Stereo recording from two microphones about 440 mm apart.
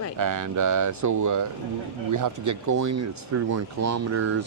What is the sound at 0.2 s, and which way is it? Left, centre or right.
Speech, right.